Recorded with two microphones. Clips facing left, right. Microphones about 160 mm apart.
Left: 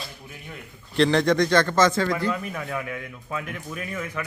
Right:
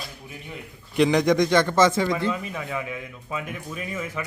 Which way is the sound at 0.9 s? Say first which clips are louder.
Right 1 dB; 10° right (ahead or behind).